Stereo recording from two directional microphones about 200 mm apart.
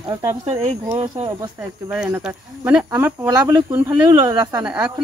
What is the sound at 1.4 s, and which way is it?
Speech, 10° right (ahead or behind).